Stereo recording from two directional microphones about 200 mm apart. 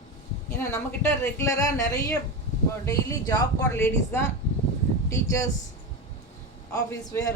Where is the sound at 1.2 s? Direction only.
15° left (ahead or behind).